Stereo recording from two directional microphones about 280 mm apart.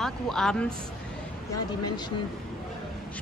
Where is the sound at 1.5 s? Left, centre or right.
Centre.